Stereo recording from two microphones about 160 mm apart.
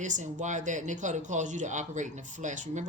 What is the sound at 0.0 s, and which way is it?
Speech, 50° right (ahead or behind).